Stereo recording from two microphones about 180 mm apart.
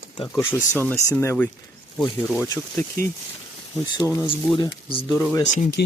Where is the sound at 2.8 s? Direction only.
10° left (ahead or behind).